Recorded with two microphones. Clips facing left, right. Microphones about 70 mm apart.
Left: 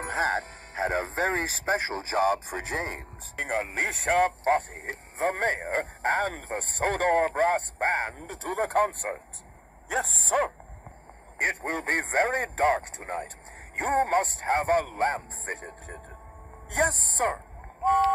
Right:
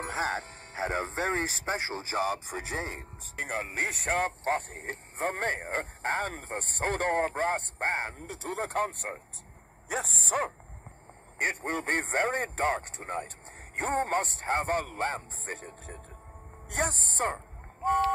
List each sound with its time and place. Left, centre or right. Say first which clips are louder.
0.0 s speech: left 4 dB; left
16.7 s speech: left 5 dB; left